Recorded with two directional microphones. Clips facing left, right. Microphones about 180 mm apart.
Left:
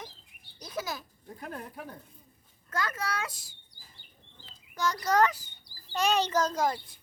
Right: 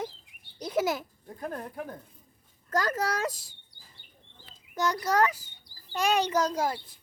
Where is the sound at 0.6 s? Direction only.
25° right (ahead or behind).